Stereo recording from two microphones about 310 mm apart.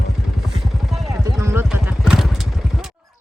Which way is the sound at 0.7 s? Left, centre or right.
Centre.